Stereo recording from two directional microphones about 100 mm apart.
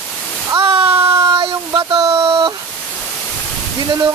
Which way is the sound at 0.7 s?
65° right (ahead or behind).